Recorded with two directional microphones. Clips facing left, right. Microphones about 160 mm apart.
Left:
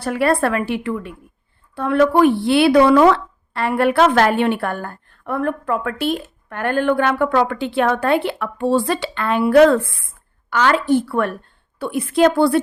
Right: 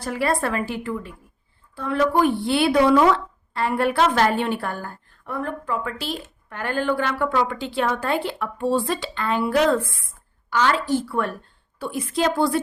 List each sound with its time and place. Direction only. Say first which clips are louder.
0.0 s a woman's voice: left 6 dB; 65° left (ahead or behind)